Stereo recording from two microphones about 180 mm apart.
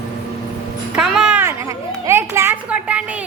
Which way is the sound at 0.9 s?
5° right (ahead or behind).